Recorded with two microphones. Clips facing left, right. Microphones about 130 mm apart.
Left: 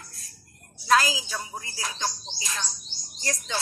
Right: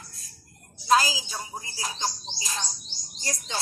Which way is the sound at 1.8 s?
35° right (ahead or behind).